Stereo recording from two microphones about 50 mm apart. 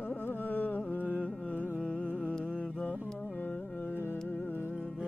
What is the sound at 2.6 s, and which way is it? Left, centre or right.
Mantra, left.